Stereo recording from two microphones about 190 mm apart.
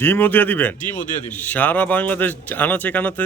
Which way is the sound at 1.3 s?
10° left (ahead or behind).